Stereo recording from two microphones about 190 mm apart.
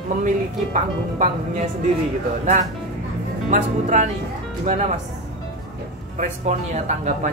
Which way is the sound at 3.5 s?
40° right (ahead or behind).